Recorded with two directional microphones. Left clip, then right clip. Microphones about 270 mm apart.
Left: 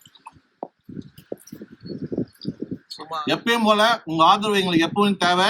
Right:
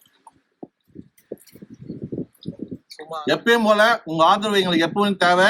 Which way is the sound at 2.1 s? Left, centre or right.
Right.